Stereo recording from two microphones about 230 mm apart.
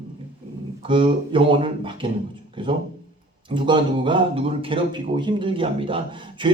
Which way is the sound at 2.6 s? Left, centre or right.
Right.